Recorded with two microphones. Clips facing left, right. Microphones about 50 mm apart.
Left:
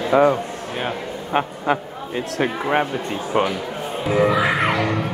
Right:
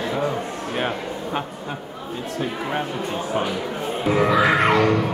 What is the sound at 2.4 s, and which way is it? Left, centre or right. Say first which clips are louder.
Speech: left 6 dB; left.